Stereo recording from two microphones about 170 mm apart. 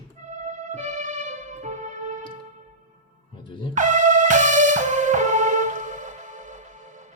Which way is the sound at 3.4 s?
30° left (ahead or behind).